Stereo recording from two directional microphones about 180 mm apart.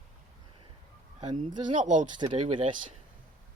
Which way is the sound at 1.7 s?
45° right (ahead or behind).